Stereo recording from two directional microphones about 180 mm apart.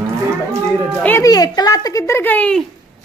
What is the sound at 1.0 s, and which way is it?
A woman's voice, 15° left (ahead or behind).